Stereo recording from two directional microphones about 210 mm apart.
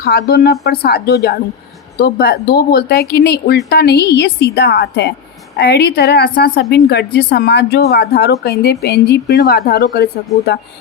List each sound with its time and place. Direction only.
0.0 s a woman's voice: 50° left (ahead or behind)